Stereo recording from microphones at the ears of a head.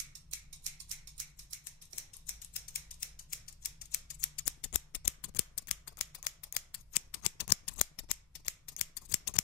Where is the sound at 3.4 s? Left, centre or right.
Left.